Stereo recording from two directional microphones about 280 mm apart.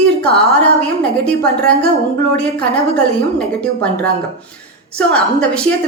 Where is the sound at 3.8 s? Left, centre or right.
Centre.